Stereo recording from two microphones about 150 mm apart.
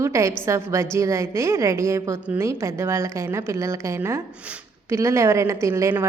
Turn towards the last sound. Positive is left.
turn(degrees=-20)  # may be behind; listen again after turning